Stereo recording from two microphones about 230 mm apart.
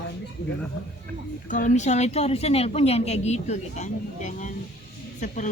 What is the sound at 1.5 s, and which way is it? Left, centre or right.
A woman's voice, left.